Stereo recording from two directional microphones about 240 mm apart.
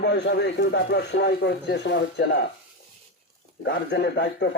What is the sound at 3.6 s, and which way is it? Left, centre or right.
Speech, left.